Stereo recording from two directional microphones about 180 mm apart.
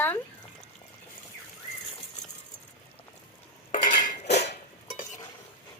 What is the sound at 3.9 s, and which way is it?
Cutlery, 40° left (ahead or behind).